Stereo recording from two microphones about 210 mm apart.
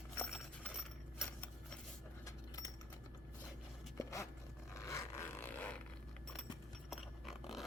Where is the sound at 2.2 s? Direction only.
15° left (ahead or behind).